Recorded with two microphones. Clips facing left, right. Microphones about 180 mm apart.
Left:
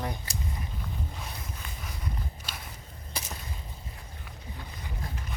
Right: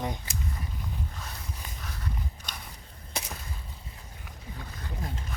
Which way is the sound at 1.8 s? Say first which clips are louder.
Even; 10° left (ahead or behind).